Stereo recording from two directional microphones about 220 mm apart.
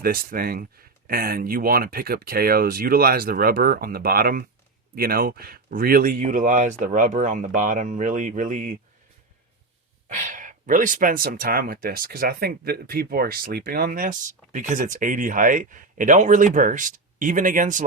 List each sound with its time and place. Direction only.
0.0 s speech: 40° right (ahead or behind)
10.1 s speech: 35° right (ahead or behind)